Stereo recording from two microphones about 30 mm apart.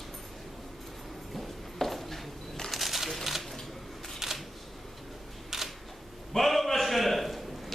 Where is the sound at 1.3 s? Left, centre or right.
Centre.